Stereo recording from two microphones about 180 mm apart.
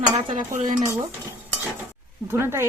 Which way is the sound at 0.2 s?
25° right (ahead or behind).